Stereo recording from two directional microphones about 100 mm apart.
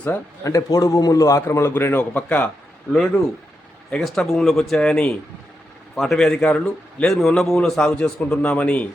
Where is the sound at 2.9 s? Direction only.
5° left (ahead or behind).